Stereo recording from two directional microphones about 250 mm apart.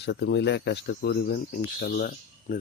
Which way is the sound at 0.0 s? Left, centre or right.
Left.